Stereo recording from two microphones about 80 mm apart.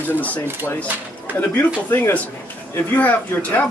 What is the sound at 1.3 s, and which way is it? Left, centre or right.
A man's voice, left.